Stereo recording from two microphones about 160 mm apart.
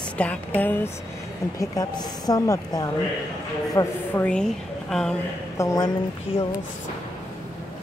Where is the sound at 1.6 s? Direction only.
25° left (ahead or behind); by 5.2 s 5° left (ahead or behind).